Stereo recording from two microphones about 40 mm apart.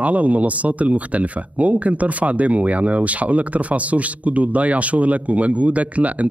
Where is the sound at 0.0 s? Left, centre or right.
Right.